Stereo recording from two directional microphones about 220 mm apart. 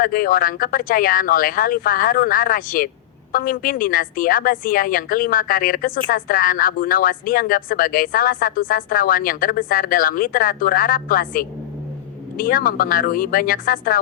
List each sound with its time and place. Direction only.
0.0 s a woman's voice: 40° left (ahead or behind)